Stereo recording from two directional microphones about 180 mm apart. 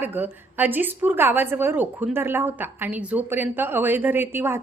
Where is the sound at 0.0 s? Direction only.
10° right (ahead or behind).